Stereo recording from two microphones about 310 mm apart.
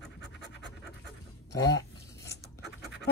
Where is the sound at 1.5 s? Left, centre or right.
Left.